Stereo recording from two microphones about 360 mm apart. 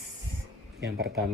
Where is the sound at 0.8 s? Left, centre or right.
Right.